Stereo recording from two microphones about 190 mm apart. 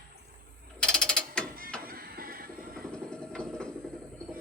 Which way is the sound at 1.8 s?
50° right (ahead or behind).